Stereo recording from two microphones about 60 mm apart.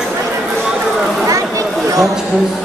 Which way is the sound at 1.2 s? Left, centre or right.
Right.